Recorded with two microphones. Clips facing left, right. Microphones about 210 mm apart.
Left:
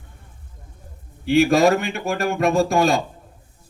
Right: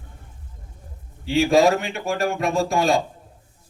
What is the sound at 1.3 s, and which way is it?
A man's voice, 65° left (ahead or behind).